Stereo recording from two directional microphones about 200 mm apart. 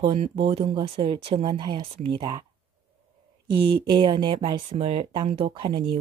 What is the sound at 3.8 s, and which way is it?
Speech, 25° right (ahead or behind).